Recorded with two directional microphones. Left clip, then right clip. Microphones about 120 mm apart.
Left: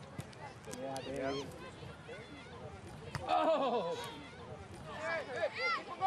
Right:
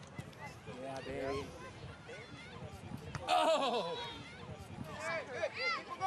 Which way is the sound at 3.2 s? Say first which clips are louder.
Even; 40° right (ahead or behind).